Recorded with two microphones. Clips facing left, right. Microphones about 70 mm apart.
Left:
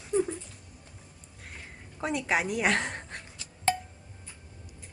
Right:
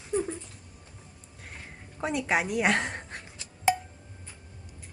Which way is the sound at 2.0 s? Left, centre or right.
Centre.